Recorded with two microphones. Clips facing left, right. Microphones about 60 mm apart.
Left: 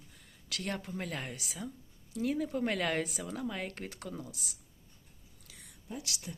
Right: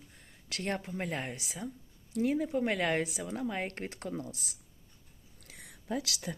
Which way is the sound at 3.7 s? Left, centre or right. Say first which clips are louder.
Right 4 dB; right.